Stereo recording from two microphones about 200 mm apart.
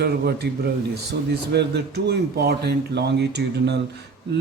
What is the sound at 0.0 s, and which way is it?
Speech, 55° right (ahead or behind).